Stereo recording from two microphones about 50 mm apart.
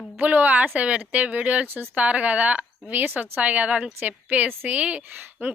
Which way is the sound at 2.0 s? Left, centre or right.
Right.